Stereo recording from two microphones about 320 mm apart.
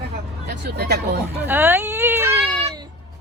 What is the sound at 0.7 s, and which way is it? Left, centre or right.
Speech, right.